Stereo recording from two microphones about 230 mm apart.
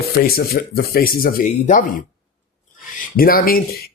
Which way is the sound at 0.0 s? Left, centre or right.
Left.